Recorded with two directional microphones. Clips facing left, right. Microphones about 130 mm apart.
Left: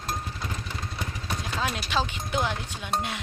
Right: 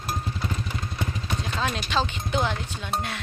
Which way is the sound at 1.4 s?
10° left (ahead or behind).